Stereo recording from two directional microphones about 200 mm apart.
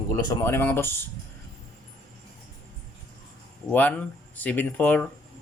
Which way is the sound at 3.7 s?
10° left (ahead or behind).